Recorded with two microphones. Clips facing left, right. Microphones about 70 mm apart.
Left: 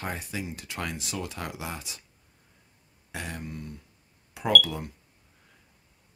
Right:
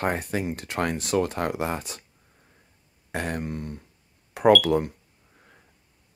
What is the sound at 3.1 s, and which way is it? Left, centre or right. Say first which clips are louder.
Speech: right 8 dB; right.